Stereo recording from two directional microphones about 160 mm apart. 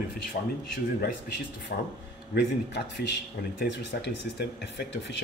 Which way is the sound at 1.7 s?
70° left (ahead or behind).